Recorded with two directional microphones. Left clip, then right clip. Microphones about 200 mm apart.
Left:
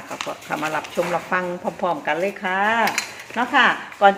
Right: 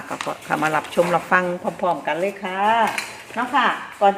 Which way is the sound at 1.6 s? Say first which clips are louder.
Right 1 dB; 5° left (ahead or behind).